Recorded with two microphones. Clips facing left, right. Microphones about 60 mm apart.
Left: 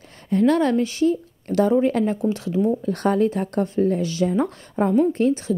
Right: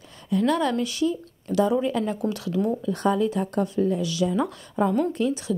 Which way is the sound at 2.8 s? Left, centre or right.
Left.